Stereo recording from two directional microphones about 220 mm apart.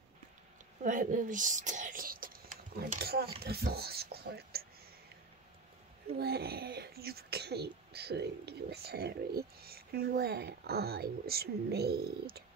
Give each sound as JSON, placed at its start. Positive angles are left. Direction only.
{"t": 0.8, "sound": "speech", "side_deg": -35}
{"t": 6.1, "sound": "speech", "side_deg": -45}